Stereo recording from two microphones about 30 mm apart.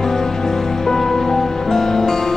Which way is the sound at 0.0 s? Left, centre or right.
Centre.